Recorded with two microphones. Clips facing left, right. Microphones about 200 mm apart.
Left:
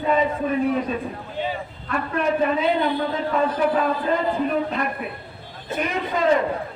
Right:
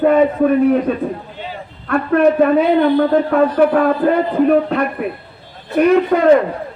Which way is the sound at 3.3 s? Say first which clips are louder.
Right 5 dB; 60° right (ahead or behind).